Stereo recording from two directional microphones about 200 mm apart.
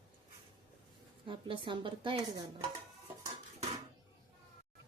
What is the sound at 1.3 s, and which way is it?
Speech, 25° right (ahead or behind).